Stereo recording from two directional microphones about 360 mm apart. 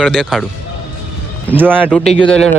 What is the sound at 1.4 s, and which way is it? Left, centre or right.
Speech, centre.